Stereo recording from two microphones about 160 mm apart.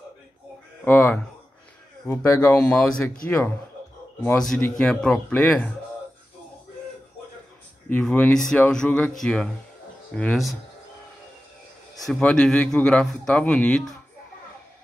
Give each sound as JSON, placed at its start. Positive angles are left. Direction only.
{"t": 0.8, "sound": "a man's voice", "side_deg": 15}
{"t": 2.5, "sound": "speech", "side_deg": 5}
{"t": 4.7, "sound": "a man's voice", "side_deg": 5}
{"t": 7.9, "sound": "a man's voice", "side_deg": 10}
{"t": 12.1, "sound": "a man's voice", "side_deg": 5}